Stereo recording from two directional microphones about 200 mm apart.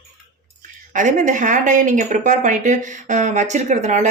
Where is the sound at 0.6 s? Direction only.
40° right (ahead or behind).